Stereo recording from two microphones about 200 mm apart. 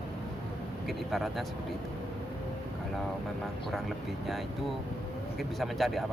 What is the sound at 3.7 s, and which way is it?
Speech, centre (ahead or behind).